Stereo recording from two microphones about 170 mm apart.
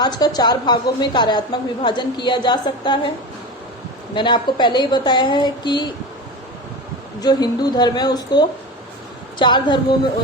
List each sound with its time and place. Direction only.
0.0 s a woman's voice: 25° left (ahead or behind)
4.1 s a woman's voice: 30° left (ahead or behind)
7.2 s a woman's voice: 25° left (ahead or behind)